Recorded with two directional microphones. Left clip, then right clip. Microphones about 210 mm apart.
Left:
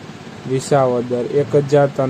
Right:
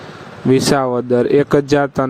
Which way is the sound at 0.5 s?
45° right (ahead or behind).